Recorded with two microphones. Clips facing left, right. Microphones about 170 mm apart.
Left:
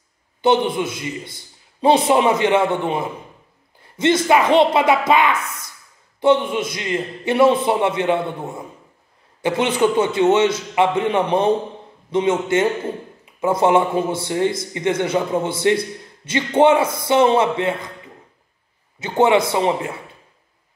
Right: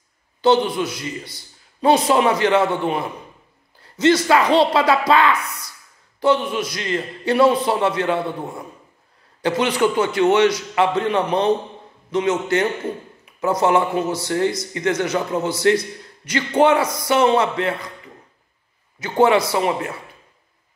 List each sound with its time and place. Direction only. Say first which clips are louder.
0.4 s a man's voice: even; 20° left (ahead or behind)
4.3 s a man's voice: left 1 dB; 20° left (ahead or behind)
18.9 s a man's voice: even; 25° left (ahead or behind)